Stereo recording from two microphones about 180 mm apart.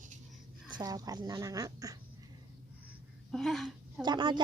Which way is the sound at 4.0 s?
25° right (ahead or behind).